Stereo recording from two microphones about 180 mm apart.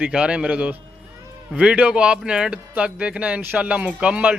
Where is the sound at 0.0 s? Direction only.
5° right (ahead or behind).